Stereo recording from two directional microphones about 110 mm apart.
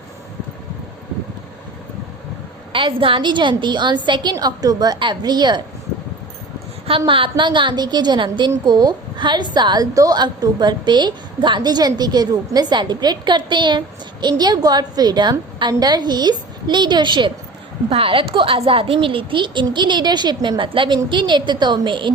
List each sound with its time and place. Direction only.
2.7 s speech: 50° right (ahead or behind)
7.1 s a woman's voice: 50° right (ahead or behind)
17.8 s a woman's voice: 55° right (ahead or behind)